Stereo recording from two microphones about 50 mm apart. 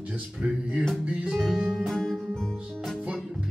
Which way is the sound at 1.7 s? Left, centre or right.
Centre.